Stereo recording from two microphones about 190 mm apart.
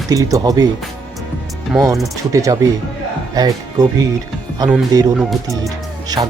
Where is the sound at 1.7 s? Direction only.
5° right (ahead or behind).